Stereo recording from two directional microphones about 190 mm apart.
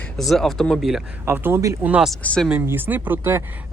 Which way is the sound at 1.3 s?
10° right (ahead or behind).